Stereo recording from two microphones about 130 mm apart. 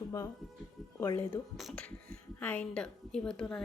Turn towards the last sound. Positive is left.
turn(degrees=5)  # may be behind; listen again after turning